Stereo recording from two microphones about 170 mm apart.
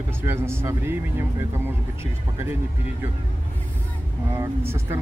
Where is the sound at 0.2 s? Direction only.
15° right (ahead or behind).